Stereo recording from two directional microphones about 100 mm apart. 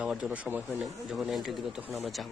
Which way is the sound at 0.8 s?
Centre (ahead or behind).